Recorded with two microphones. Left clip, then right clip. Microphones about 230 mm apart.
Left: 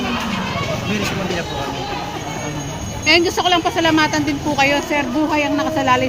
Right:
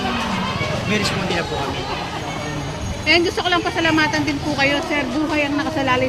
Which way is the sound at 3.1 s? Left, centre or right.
Left.